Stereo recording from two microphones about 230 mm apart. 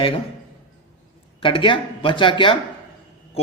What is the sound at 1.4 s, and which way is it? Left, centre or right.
A man's voice, left.